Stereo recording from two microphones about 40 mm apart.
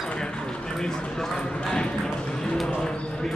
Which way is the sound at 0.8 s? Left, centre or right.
Centre.